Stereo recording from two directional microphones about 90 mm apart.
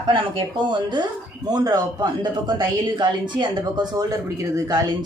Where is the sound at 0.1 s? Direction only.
65° right (ahead or behind).